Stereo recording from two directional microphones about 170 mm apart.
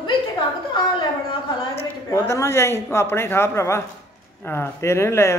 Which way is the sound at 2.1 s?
15° left (ahead or behind).